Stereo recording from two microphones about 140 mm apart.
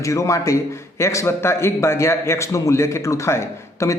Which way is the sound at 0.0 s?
20° left (ahead or behind).